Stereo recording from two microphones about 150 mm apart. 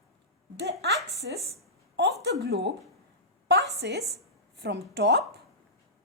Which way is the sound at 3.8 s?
90° right.